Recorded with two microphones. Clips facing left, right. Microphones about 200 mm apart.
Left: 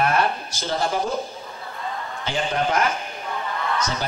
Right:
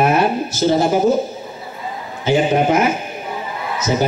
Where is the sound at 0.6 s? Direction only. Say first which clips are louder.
Right 13 dB; 25° right (ahead or behind).